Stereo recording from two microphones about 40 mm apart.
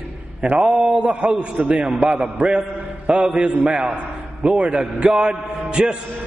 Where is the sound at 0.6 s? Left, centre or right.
Right.